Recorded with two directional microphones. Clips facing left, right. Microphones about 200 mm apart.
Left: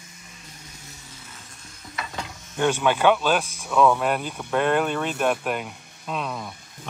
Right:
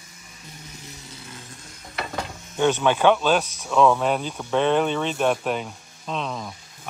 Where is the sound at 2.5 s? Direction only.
5° left (ahead or behind).